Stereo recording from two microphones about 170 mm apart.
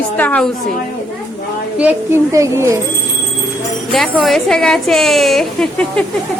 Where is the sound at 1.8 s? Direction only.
10° right (ahead or behind).